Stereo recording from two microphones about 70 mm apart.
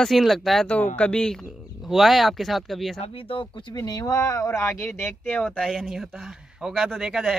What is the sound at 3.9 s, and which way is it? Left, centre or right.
Speech, left.